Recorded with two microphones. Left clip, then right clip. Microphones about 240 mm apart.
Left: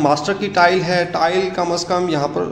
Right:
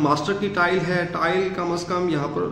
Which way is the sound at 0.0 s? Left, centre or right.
Centre.